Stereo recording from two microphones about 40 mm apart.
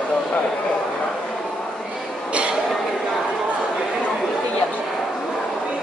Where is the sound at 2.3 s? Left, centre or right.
Right.